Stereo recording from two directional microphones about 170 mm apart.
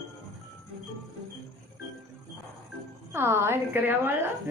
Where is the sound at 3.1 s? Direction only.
15° right (ahead or behind).